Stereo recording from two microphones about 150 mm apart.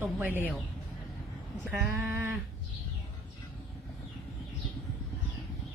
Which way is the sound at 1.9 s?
15° right (ahead or behind).